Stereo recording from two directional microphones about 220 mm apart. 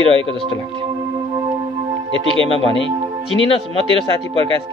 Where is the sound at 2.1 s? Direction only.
25° right (ahead or behind).